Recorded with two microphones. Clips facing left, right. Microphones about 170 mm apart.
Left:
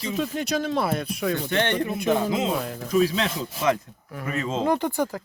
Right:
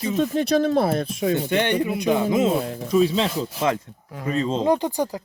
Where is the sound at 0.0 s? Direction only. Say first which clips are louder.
Right 5 dB; 40° right (ahead or behind).